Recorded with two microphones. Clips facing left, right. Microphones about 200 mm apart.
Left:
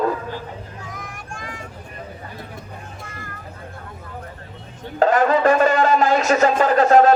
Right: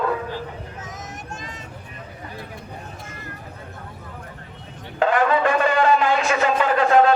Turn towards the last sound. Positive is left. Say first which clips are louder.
# left 3 dB
turn(degrees=40)  # may be behind; listen again after turning